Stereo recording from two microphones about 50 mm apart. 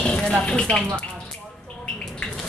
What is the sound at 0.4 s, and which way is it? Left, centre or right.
Speech, centre.